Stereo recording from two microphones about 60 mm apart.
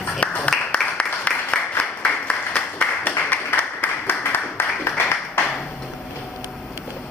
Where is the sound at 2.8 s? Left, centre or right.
Left.